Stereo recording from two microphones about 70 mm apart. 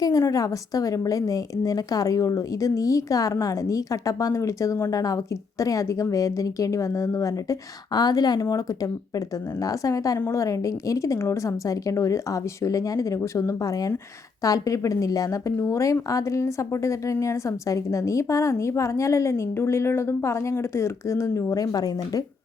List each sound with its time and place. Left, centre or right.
0.0 s a woman's voice: left
7.9 s speech: left
8.4 s a woman's voice: left